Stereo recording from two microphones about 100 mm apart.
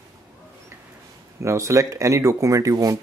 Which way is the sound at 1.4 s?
30° right (ahead or behind).